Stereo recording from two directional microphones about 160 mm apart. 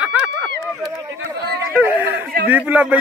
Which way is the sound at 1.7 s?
10° right (ahead or behind).